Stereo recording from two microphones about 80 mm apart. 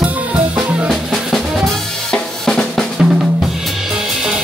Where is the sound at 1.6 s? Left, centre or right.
Centre.